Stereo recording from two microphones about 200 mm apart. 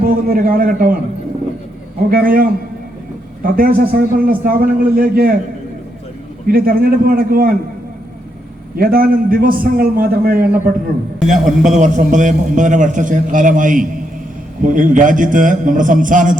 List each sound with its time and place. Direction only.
0.0 s a man's voice: 45° right (ahead or behind)
2.0 s a man's voice: 45° right (ahead or behind)
6.5 s a man's voice: 50° right (ahead or behind)
8.7 s a man's voice: 50° right (ahead or behind)
11.2 s a man's voice: centre (ahead or behind)
11.7 s a man's voice: 35° right (ahead or behind)